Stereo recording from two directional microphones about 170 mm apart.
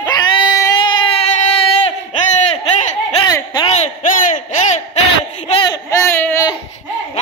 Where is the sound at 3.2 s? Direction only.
25° left (ahead or behind).